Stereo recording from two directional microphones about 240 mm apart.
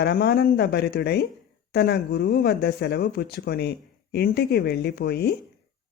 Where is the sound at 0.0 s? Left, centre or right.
Left.